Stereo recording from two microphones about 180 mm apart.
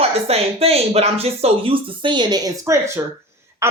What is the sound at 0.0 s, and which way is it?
Speech, 35° right (ahead or behind).